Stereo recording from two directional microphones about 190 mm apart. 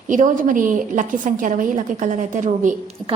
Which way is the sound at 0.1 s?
45° right (ahead or behind).